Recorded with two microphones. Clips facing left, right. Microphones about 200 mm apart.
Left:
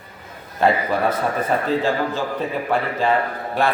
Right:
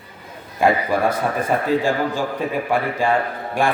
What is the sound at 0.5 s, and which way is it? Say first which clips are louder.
Speech: right 1 dB; 10° right (ahead or behind).